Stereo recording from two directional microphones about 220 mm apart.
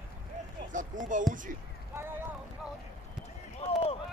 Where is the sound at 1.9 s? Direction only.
10° right (ahead or behind).